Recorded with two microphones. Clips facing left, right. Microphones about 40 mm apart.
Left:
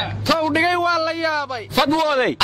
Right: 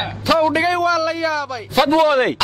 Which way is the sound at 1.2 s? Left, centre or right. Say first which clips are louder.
Right 1 dB; left.